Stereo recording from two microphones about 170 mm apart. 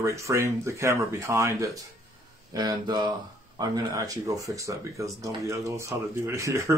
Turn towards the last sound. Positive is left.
turn(degrees=-15)  # may be behind; listen again after turning